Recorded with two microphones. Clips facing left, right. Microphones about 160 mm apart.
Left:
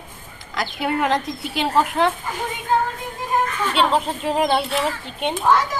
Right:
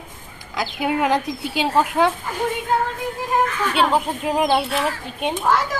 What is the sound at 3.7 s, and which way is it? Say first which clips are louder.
Speech: left 2 dB; 10° right (ahead or behind).